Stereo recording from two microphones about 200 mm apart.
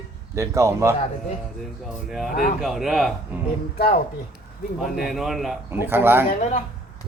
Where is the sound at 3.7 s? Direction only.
45° left (ahead or behind).